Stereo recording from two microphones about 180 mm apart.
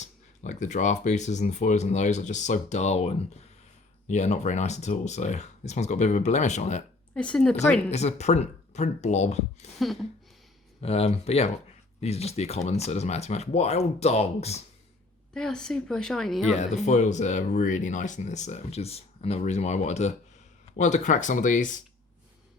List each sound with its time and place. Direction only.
0.0 s speech: 40° left (ahead or behind)
7.1 s a woman's voice: 5° left (ahead or behind)
7.9 s speech: 40° left (ahead or behind)
9.7 s a woman's voice: centre (ahead or behind)
10.8 s speech: 35° left (ahead or behind)
15.3 s a woman's voice: 5° left (ahead or behind)
16.5 s speech: 40° left (ahead or behind)